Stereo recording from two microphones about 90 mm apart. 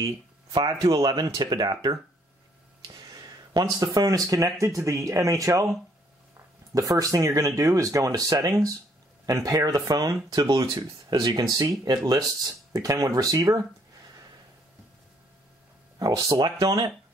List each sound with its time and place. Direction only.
0.6 s speech: 40° right (ahead or behind)
2.9 s a sound: 50° right (ahead or behind)
3.8 s speech: 40° right (ahead or behind)
6.7 s speech: 40° right (ahead or behind)
16.0 s speech: 40° right (ahead or behind)